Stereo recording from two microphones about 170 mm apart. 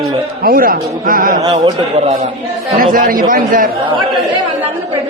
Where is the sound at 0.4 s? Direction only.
60° right (ahead or behind).